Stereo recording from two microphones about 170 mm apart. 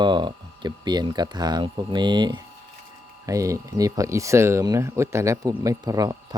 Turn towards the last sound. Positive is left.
turn(degrees=-20)  # may be behind; listen again after turning